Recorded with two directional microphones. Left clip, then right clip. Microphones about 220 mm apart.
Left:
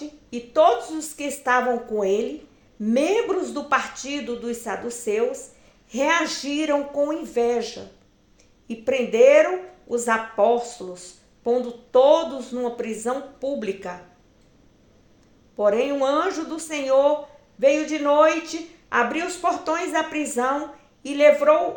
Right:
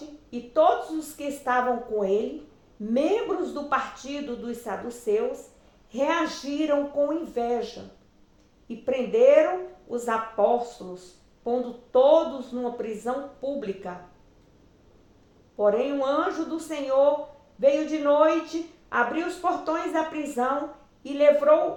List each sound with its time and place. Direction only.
0.3 s speech: 45° left (ahead or behind)
15.5 s speech: 45° left (ahead or behind)